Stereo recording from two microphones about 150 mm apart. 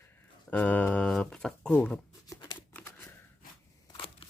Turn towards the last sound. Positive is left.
turn(degrees=35)  # may be behind; listen again after turning